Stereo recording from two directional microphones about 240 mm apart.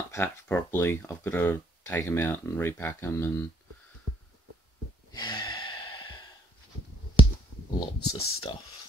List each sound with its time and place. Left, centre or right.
0.1 s speech: centre
5.1 s gasp: centre
8.0 s speech: left